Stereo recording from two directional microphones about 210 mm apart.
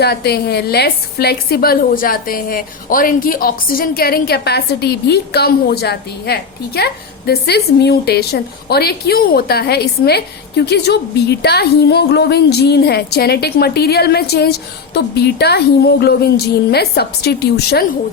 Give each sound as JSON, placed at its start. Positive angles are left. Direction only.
{"t": 0.0, "sound": "a woman's voice", "side_deg": 50}